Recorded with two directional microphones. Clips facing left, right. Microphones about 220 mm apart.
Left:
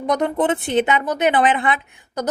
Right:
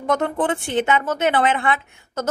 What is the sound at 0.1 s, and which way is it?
A woman's voice, 15° left (ahead or behind).